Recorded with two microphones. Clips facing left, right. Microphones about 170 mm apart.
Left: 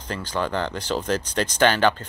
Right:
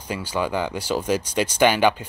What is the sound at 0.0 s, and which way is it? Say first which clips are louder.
Speech: right 1 dB; 10° right (ahead or behind).